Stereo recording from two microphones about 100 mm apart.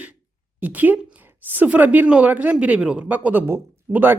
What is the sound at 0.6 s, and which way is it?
A woman's voice, 15° right (ahead or behind).